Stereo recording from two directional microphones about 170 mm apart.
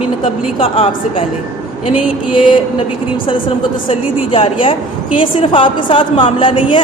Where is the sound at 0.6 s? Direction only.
35° left (ahead or behind).